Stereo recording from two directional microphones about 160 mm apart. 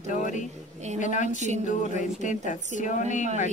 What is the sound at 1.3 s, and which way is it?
Speech, 45° right (ahead or behind).